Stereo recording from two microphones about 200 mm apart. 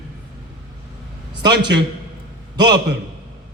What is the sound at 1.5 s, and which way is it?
Speech, 55° right (ahead or behind).